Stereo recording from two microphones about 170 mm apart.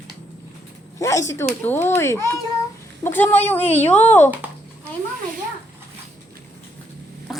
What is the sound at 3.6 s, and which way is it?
Speech, 40° left (ahead or behind).